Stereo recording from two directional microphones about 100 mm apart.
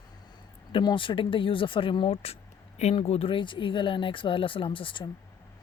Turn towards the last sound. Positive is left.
turn(degrees=60)  # may be behind; listen again after turning